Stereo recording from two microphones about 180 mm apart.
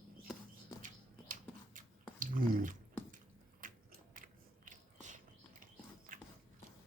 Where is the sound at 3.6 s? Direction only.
45° right (ahead or behind).